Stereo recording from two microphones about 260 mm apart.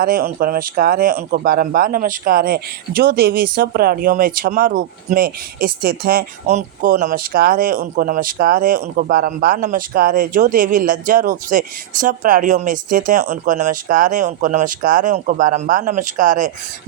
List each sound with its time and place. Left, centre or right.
0.0 s speech: right